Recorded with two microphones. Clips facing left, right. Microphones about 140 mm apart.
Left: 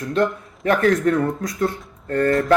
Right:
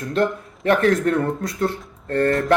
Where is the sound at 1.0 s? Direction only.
30° right (ahead or behind).